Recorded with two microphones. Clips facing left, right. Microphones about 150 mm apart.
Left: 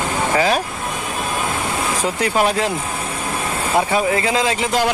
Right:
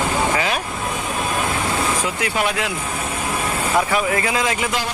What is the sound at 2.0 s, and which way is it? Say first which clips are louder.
Speech: left 4 dB; 35° left (ahead or behind).